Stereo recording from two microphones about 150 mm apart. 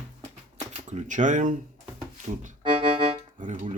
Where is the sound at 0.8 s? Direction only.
55° right (ahead or behind).